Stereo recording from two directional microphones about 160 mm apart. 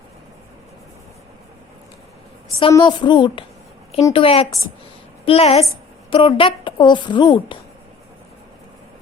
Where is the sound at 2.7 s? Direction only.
30° left (ahead or behind).